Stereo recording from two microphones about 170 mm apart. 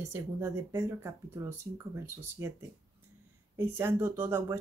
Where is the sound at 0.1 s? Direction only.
15° right (ahead or behind).